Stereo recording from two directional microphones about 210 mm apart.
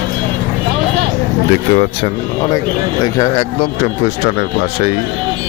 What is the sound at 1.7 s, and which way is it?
Speech, 30° left (ahead or behind).